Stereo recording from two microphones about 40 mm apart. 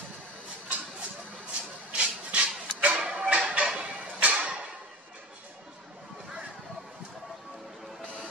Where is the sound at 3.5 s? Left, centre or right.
Right.